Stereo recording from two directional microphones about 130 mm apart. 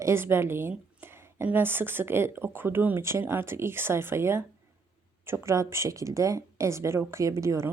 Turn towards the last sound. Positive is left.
turn(degrees=-20)  # may be behind; listen again after turning